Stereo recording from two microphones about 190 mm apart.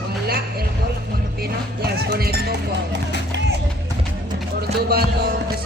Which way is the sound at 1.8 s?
55° right (ahead or behind).